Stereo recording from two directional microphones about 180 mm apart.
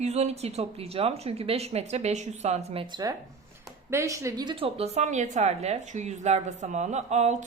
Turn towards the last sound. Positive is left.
turn(degrees=-40)  # may be behind; listen again after turning